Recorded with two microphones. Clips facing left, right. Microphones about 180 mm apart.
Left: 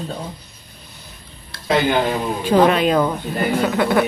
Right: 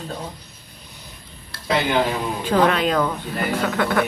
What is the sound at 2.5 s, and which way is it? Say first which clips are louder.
Speech: left 4 dB; 15° left (ahead or behind).